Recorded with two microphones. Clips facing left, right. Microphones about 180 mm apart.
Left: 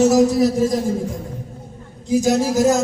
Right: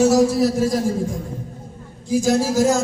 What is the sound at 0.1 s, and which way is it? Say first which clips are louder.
Speech: left 1 dB; 20° left (ahead or behind).